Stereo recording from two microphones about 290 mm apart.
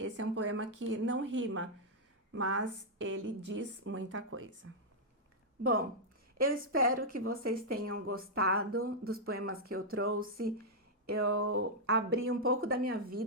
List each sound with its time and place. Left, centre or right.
0.0 s a woman's voice: right
6.4 s a woman's voice: right
11.1 s a sound: right
11.4 s a woman's voice: right